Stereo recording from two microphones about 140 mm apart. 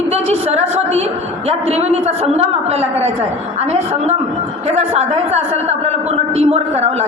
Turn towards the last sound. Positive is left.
turn(degrees=-50)  # may be behind; listen again after turning